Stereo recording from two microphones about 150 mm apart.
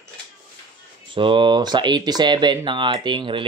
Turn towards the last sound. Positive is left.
turn(degrees=-30)  # may be behind; listen again after turning